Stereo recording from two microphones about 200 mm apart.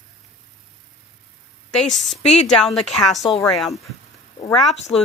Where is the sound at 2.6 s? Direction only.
Centre (ahead or behind).